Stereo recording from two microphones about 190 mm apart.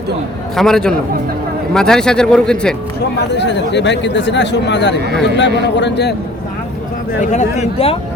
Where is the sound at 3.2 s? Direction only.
65° left (ahead or behind).